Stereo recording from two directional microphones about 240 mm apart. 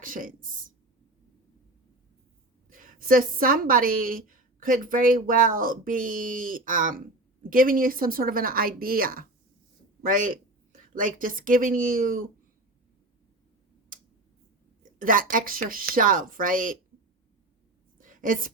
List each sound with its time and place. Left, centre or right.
0.0 s a woman's voice: right
2.6 s a woman's voice: right
14.9 s a woman's voice: right
17.9 s a sound: right